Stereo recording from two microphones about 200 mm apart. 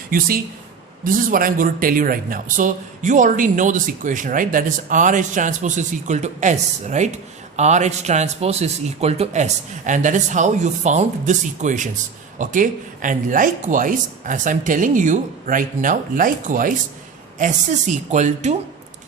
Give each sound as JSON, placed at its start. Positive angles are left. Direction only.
{"t": 0.1, "sound": "speech", "side_deg": -45}